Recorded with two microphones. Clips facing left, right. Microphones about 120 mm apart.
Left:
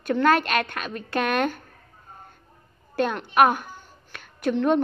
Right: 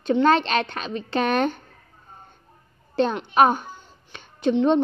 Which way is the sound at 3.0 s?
30° right (ahead or behind).